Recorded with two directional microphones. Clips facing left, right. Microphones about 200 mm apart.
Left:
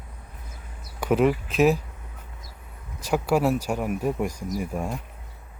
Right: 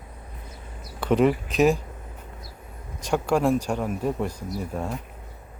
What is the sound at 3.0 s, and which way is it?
Speech, 5° left (ahead or behind).